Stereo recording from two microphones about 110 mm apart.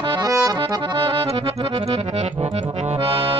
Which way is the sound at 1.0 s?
55° right (ahead or behind).